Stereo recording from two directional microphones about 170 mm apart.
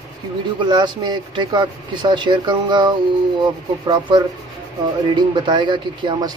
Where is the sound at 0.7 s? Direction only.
25° right (ahead or behind).